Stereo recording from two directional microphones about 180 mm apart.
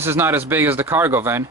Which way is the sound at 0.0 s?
15° right (ahead or behind).